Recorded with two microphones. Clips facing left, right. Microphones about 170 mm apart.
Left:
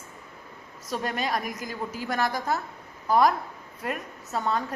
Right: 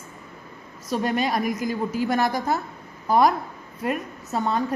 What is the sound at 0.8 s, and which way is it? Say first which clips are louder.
A woman's voice: right 6 dB; 5° right (ahead or behind).